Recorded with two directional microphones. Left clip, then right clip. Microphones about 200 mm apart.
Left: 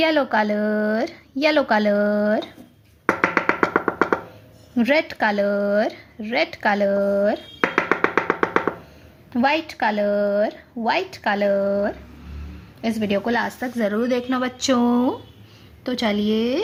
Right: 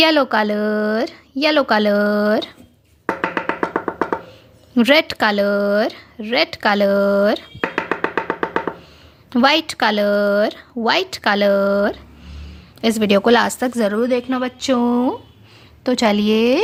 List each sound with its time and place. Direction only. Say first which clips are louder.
0.0 s speech: right 4 dB; 25° right (ahead or behind)
3.1 s music: left 2 dB; 5° left (ahead or behind)
4.7 s speech: right 5 dB; 30° right (ahead or behind)
7.9 s music: left 1 dB; centre (ahead or behind)
9.3 s speech: right 5 dB; 35° right (ahead or behind); by 15.2 s 15° right (ahead or behind)
15.8 s speech: right 6 dB; 35° right (ahead or behind)